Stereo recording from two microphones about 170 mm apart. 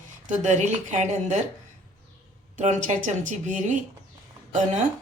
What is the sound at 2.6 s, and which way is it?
Speech, 45° right (ahead or behind).